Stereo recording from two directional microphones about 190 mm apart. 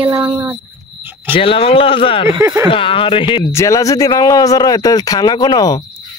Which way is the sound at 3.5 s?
15° left (ahead or behind).